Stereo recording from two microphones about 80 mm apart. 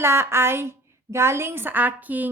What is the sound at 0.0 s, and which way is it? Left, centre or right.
A woman's voice, right.